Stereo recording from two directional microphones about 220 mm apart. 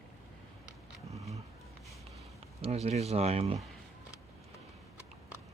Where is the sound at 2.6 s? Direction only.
30° right (ahead or behind).